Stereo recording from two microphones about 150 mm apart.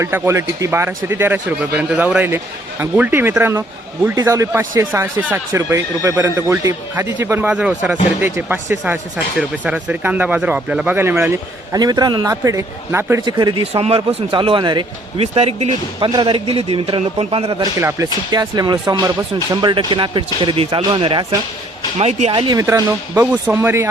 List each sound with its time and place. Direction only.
0.0 s speech: 20° right (ahead or behind)
13.2 s speech: 30° right (ahead or behind)
15.2 s speech: 45° right (ahead or behind)
17.6 s speech: 20° right (ahead or behind); by 22.3 s 45° right (ahead or behind)
22.3 s speech: 30° right (ahead or behind)
22.6 s speech: 15° right (ahead or behind)